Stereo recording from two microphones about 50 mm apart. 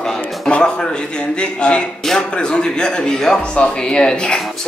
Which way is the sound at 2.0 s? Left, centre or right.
Centre.